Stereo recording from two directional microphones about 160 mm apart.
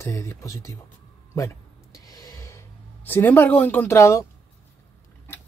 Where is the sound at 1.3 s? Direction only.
20° left (ahead or behind).